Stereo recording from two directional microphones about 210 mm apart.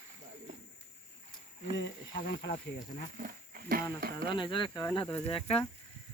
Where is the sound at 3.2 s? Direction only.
45° right (ahead or behind).